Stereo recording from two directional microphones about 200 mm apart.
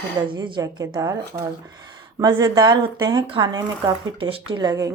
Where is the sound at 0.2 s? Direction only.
20° right (ahead or behind).